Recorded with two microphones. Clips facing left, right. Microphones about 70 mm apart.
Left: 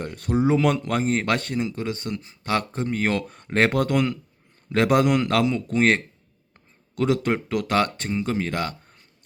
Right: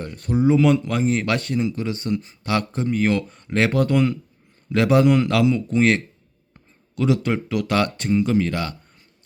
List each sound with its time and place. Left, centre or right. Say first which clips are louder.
0.0 s speech: right 2 dB; left
1.5 s speech: right 3 dB; left
3.7 s speech: right 3 dB; left
7.7 s speech: right 3 dB; left